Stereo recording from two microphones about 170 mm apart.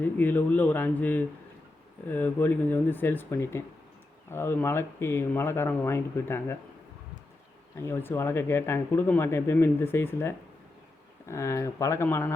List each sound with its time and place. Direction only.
0.0 s speech: 10° left (ahead or behind)
7.8 s speech: 15° left (ahead or behind)